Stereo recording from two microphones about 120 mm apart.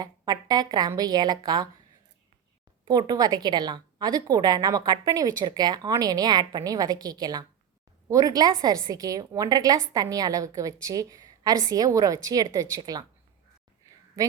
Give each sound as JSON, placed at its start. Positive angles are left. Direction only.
{"t": 0.0, "sound": "a woman's voice", "side_deg": -35}
{"t": 3.1, "sound": "a woman's voice", "side_deg": -35}
{"t": 14.2, "sound": "a woman's voice", "side_deg": -25}